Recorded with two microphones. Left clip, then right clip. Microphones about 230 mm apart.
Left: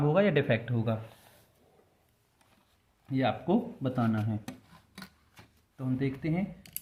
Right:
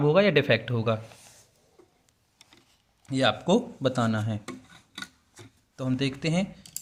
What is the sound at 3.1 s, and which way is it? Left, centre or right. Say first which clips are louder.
Speech: right 6 dB; right.